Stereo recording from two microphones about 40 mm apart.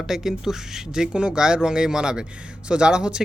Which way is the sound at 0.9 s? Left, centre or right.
Right.